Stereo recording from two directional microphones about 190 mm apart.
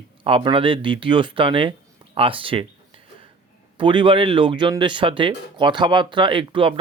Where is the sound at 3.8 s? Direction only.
25° right (ahead or behind).